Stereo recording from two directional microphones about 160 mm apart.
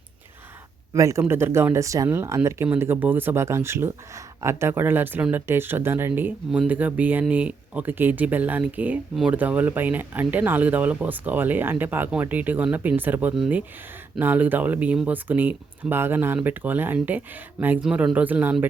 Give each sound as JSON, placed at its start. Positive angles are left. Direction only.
{"t": 0.9, "sound": "speech", "side_deg": -20}